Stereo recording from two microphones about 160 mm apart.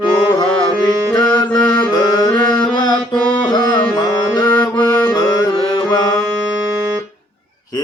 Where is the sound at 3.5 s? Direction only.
25° left (ahead or behind).